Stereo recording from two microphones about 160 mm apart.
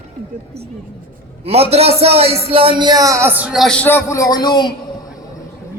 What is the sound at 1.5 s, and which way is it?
A man's voice, 40° right (ahead or behind).